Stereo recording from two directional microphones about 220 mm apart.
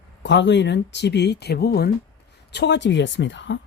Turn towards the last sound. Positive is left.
turn(degrees=55)  # may be behind; listen again after turning